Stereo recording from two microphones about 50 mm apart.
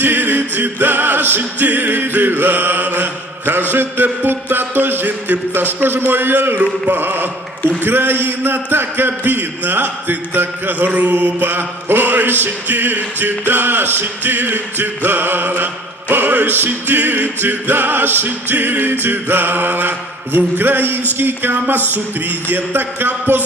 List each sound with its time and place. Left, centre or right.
0.0 s music: right
10.8 s mantra: right
11.4 s music: right